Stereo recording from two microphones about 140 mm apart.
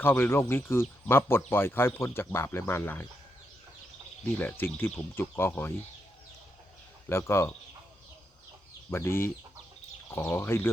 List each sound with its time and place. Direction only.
0.0 s speech: 15° left (ahead or behind)
4.4 s speech: 15° left (ahead or behind)
7.1 s speech: 20° left (ahead or behind)
8.9 s speech: 20° left (ahead or behind)